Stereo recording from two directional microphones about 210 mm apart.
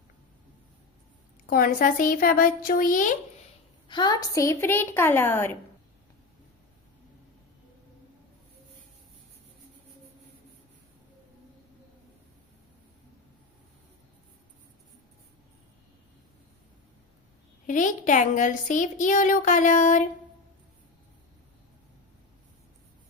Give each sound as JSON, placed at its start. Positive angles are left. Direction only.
{"t": 1.5, "sound": "a woman's voice", "side_deg": 40}
{"t": 3.8, "sound": "a woman's voice", "side_deg": 20}
{"t": 17.7, "sound": "a woman's voice", "side_deg": 40}